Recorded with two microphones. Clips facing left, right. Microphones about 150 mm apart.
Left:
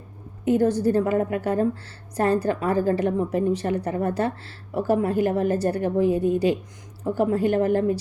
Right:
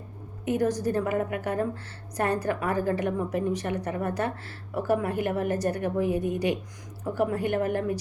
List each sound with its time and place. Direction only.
0.4 s a woman's voice: 30° left (ahead or behind)